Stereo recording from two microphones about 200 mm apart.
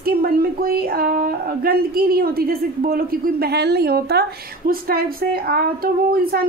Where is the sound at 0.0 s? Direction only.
50° right (ahead or behind).